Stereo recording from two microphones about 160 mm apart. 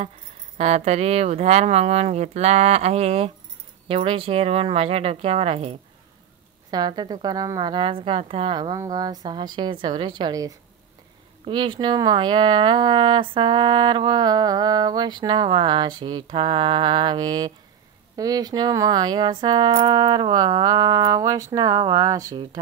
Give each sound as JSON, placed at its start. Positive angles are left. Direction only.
{"t": 0.6, "sound": "speech", "side_deg": -40}
{"t": 6.7, "sound": "speech", "side_deg": -25}